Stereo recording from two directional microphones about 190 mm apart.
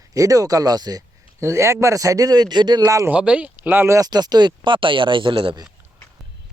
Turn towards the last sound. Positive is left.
turn(degrees=-25)  # may be behind; listen again after turning